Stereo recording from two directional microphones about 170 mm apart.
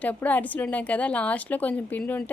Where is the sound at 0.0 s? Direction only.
10° left (ahead or behind).